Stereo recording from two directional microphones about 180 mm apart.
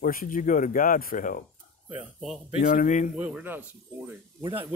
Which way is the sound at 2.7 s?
45° left (ahead or behind).